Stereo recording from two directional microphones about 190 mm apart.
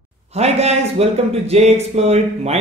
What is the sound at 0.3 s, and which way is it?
Speech, 35° right (ahead or behind).